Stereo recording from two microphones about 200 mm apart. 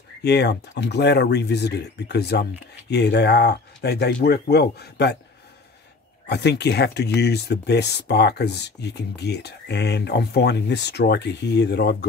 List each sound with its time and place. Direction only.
0.2 s speech: 55° left (ahead or behind)
6.2 s speech: 60° left (ahead or behind)